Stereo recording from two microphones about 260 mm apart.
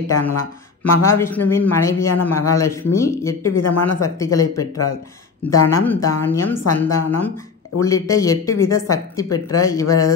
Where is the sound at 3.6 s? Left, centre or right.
Left.